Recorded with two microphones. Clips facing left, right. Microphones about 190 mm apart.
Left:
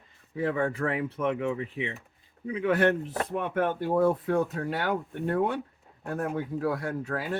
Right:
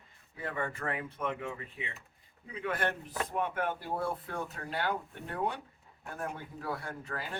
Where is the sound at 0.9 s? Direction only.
65° left (ahead or behind).